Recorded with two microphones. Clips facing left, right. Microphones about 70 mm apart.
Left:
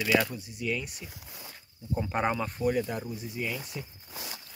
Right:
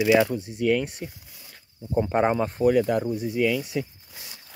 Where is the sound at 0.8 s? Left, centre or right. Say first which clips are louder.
Right 8 dB; right.